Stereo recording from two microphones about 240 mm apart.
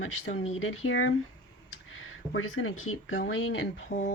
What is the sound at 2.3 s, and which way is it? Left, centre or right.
Speech, left.